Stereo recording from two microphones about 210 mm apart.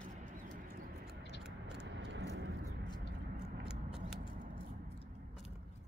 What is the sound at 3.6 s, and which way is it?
Scissors, 5° right (ahead or behind).